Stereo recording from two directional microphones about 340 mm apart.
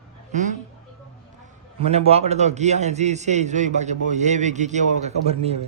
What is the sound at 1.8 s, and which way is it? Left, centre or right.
A man's voice, centre.